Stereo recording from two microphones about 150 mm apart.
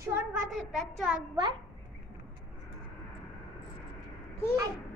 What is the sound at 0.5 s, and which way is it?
Speech, centre (ahead or behind).